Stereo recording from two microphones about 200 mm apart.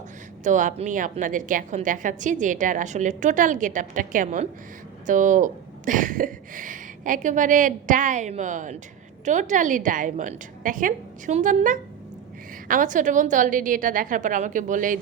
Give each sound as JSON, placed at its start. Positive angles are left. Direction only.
{"t": 0.4, "sound": "a woman's voice", "side_deg": -40}